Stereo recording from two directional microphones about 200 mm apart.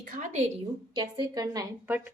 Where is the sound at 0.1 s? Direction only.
35° right (ahead or behind).